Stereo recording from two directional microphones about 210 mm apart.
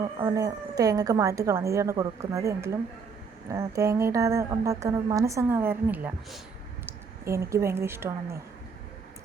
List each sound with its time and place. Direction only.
0.2 s a woman's voice: 15° right (ahead or behind)